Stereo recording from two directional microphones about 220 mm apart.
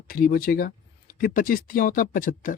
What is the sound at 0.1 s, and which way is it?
Speech, 40° left (ahead or behind).